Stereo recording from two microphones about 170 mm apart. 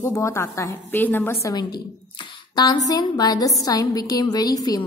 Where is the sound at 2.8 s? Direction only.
20° left (ahead or behind).